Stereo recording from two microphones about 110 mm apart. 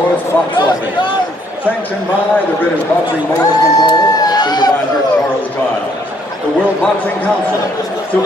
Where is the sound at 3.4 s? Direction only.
35° left (ahead or behind).